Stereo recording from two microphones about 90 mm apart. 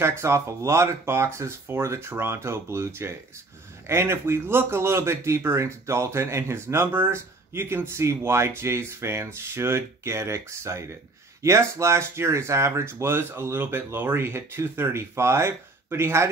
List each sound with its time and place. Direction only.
0.2 s speech: 30° right (ahead or behind)